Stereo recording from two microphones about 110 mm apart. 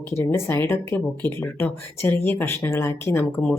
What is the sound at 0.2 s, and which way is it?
A woman's voice, 20° left (ahead or behind).